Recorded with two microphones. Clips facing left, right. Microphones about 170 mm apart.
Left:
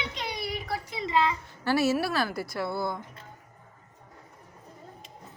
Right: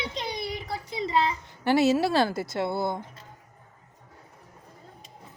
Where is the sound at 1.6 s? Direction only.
20° right (ahead or behind).